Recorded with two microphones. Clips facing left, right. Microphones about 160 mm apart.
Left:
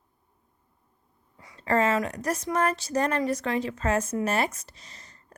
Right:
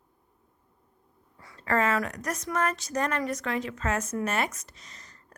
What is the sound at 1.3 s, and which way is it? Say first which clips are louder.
Speech: left 2 dB; 20° left (ahead or behind).